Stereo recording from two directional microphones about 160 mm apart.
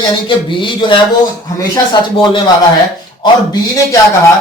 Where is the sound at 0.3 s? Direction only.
30° left (ahead or behind).